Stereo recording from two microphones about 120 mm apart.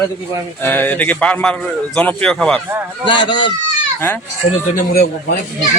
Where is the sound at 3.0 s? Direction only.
40° left (ahead or behind).